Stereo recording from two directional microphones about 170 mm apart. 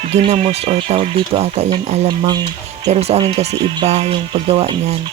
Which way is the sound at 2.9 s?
40° right (ahead or behind).